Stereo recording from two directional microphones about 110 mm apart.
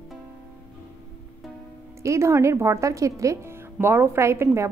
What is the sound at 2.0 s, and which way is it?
Speech, 25° right (ahead or behind).